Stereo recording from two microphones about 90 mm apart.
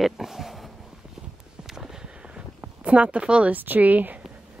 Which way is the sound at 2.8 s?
15° right (ahead or behind).